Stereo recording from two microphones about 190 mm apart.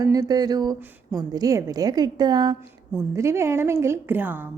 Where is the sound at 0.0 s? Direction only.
20° right (ahead or behind).